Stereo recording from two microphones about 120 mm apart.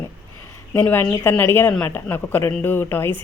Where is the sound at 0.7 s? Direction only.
15° left (ahead or behind).